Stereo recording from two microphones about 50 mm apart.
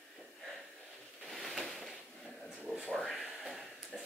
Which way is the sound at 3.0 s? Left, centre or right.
Centre.